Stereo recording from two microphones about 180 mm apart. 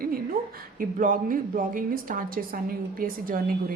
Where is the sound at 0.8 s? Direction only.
50° right (ahead or behind).